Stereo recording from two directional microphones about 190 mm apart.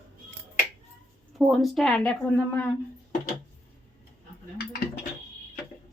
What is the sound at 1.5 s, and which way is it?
A woman's voice, centre (ahead or behind).